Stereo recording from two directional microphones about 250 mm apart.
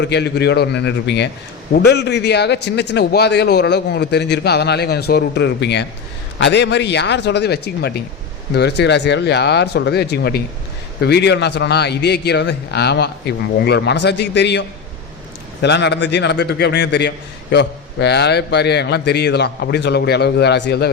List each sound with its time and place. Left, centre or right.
0.0 s a man's voice: left
15.6 s a man's voice: left